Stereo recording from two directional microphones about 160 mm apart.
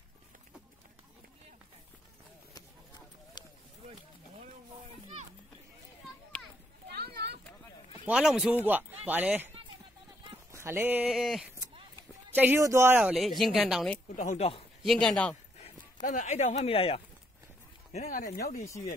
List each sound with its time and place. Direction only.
3.4 s a sound: 25° left (ahead or behind)
6.3 s children playing: 10° left (ahead or behind)
6.9 s a sound: 85° right
8.1 s speech: 5° right (ahead or behind)
10.5 s speech: 15° right (ahead or behind)
11.1 s speech: centre (ahead or behind)
12.4 s speech: 15° right (ahead or behind)
14.0 s speech: 50° left (ahead or behind)
14.9 s speech: 5° left (ahead or behind)
15.6 s speech: 55° left (ahead or behind); by 17.0 s 35° left (ahead or behind)
18.0 s speech: 65° left (ahead or behind)